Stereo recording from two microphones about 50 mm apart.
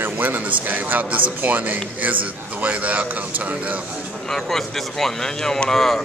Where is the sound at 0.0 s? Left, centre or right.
Right.